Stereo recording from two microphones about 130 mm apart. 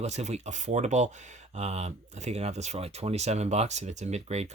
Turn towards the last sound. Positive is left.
turn(degrees=-55)  # may be behind; listen again after turning